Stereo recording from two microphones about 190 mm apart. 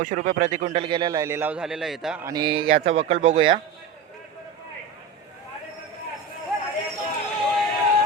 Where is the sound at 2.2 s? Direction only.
20° right (ahead or behind).